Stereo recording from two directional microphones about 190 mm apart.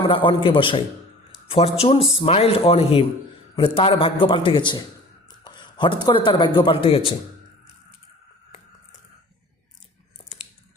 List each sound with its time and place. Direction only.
0.1 s a man's voice: 25° left (ahead or behind)